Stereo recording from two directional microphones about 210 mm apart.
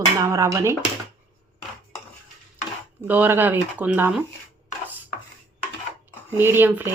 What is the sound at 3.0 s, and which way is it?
Speech, 10° right (ahead or behind).